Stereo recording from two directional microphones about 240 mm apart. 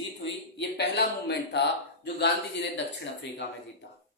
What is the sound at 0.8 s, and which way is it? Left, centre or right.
Speech, left.